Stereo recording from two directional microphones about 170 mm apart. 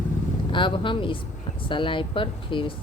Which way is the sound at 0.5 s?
30° left (ahead or behind).